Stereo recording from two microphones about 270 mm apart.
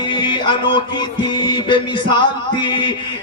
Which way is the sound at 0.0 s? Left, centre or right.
Centre.